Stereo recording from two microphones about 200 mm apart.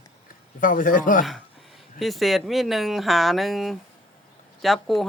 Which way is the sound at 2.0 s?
Centre (ahead or behind).